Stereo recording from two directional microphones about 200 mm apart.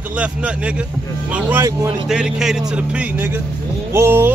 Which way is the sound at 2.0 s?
Centre (ahead or behind).